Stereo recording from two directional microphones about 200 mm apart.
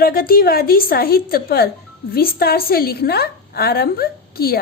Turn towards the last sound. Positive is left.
turn(degrees=50)  # may be behind; listen again after turning